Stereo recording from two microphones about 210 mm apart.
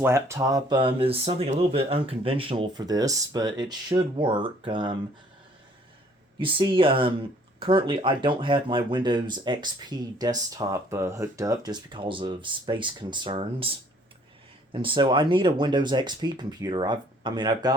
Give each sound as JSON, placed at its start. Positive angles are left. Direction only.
{"t": 0.0, "sound": "speech", "side_deg": -15}
{"t": 6.4, "sound": "speech", "side_deg": -25}